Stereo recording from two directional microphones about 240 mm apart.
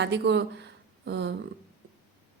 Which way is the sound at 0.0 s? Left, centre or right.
Right.